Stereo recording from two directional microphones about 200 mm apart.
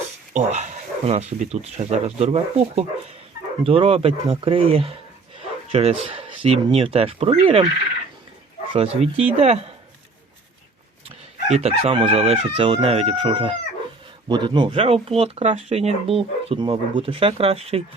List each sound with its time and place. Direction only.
0.3 s speech: 35° right (ahead or behind)
8.7 s speech: 30° right (ahead or behind)
11.4 s speech: 30° right (ahead or behind)